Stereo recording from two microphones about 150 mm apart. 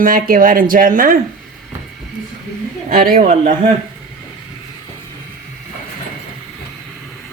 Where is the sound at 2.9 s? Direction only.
75° right (ahead or behind).